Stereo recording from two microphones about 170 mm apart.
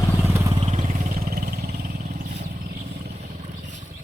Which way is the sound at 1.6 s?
45° right (ahead or behind).